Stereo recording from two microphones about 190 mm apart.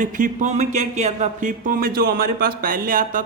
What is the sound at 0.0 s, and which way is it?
Speech, 45° right (ahead or behind).